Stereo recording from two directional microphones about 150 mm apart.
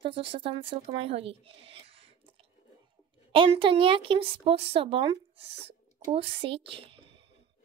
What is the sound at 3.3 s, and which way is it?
Speech, 35° right (ahead or behind).